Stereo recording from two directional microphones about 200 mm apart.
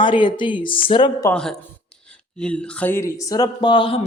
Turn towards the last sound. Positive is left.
turn(degrees=25)  # may be behind; listen again after turning